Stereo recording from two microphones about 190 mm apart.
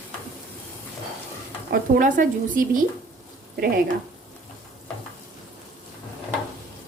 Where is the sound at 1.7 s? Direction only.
45° right (ahead or behind).